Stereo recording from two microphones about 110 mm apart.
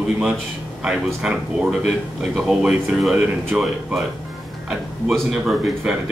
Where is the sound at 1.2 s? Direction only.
5° right (ahead or behind).